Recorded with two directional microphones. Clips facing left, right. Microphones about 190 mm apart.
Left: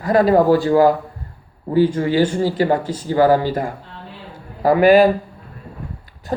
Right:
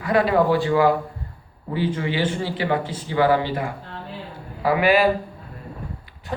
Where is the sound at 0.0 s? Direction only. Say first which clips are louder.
Left 5 dB; 40° left (ahead or behind).